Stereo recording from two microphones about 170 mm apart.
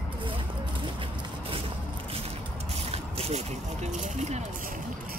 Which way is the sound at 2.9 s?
40° right (ahead or behind).